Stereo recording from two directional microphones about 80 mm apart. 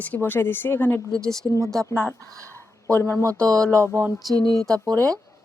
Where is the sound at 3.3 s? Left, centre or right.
Centre.